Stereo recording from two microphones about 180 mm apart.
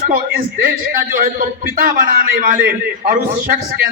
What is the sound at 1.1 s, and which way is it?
A man's voice, 50° right (ahead or behind).